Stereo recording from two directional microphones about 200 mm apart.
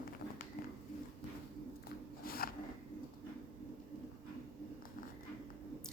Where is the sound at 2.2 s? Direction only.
50° left (ahead or behind).